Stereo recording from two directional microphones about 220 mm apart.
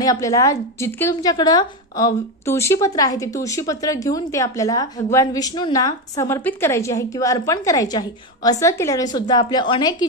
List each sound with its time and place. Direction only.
0.0 s a woman's voice: 15° left (ahead or behind)